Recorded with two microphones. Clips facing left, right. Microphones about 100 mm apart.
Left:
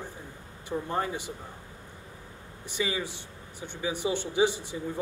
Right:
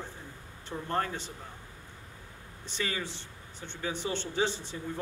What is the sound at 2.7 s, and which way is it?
A man's voice, 10° left (ahead or behind).